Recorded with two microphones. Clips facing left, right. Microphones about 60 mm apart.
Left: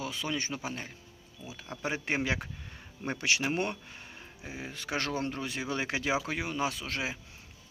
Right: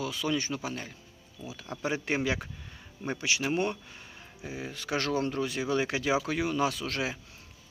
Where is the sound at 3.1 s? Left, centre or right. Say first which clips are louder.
Left 2 dB; left.